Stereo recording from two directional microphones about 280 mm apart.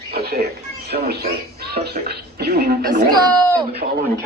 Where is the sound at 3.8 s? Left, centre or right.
Right.